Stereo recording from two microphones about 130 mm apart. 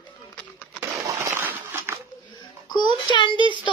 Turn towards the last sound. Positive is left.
turn(degrees=40)  # may be behind; listen again after turning